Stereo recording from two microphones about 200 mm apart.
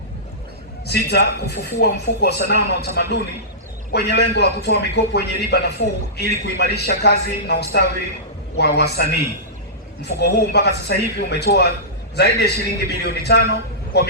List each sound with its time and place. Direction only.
0.9 s a man's voice: 55° left (ahead or behind)
10.2 s a man's voice: 55° left (ahead or behind)